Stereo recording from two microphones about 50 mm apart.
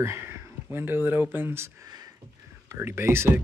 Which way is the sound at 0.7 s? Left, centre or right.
Right.